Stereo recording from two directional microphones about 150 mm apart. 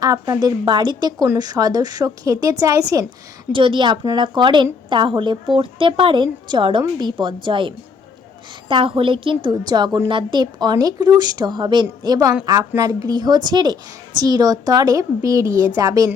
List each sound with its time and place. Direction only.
0.0 s a woman's voice: 25° right (ahead or behind)
3.5 s a woman's voice: 35° right (ahead or behind)
8.7 s a woman's voice: 35° right (ahead or behind)